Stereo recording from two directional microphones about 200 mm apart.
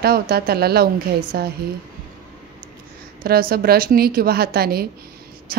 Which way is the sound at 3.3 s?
50° right (ahead or behind).